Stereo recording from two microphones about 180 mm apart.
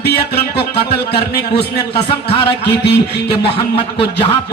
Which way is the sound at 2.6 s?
70° left (ahead or behind).